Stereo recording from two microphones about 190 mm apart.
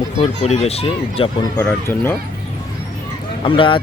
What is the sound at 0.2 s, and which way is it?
Speech, 35° left (ahead or behind).